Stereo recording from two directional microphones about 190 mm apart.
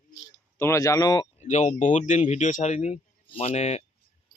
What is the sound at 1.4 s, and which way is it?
Speech, 40° left (ahead or behind).